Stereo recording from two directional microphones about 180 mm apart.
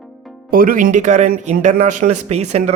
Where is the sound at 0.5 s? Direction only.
50° right (ahead or behind).